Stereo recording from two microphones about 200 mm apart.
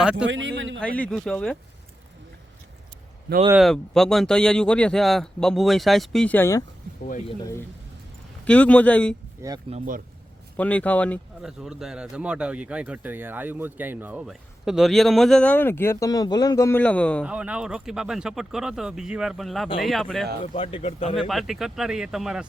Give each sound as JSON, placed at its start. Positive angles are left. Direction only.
{"t": 0.0, "sound": "speech", "side_deg": -5}
{"t": 0.3, "sound": "speech", "side_deg": -65}
{"t": 0.8, "sound": "speech", "side_deg": 5}
{"t": 3.5, "sound": "speech", "side_deg": 0}
{"t": 8.4, "sound": "speech", "side_deg": 5}
{"t": 9.6, "sound": "speech", "side_deg": -35}
{"t": 10.6, "sound": "speech", "side_deg": 5}
{"t": 17.2, "sound": "speech", "side_deg": -5}
{"t": 20.6, "sound": "speech", "side_deg": 25}
{"t": 21.2, "sound": "speech", "side_deg": 0}